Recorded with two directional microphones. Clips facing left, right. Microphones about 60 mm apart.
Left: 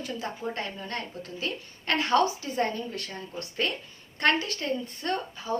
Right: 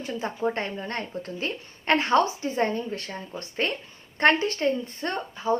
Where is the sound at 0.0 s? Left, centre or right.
Right.